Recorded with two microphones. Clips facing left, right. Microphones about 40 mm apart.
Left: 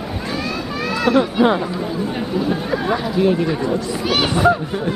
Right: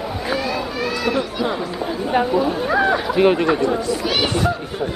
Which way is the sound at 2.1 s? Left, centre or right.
Centre.